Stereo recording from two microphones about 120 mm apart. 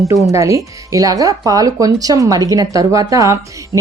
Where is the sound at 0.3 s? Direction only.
25° right (ahead or behind).